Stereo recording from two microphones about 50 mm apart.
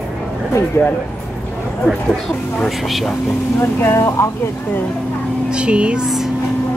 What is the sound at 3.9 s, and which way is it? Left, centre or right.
Speech, left.